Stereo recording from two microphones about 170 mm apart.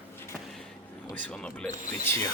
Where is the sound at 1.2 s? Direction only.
5° left (ahead or behind).